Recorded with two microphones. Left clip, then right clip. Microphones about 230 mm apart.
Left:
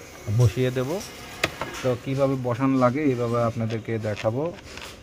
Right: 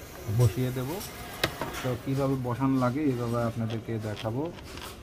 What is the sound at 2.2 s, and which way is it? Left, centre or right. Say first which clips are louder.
Speech: left 4 dB; left.